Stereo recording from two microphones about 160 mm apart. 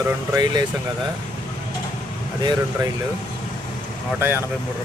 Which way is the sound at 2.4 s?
25° right (ahead or behind).